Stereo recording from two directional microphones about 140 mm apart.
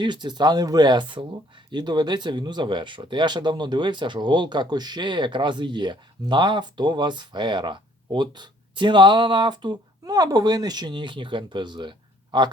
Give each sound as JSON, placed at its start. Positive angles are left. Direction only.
{"t": 0.0, "sound": "speech", "side_deg": -30}